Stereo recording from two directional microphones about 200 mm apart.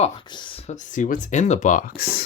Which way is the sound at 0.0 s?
25° left (ahead or behind).